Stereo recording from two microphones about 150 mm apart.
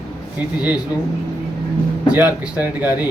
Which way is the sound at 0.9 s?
25° left (ahead or behind).